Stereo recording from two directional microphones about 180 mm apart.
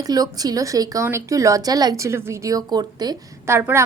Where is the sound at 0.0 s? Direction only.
20° right (ahead or behind).